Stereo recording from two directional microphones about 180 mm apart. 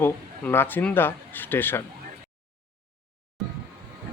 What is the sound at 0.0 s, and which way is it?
Speech, 10° left (ahead or behind).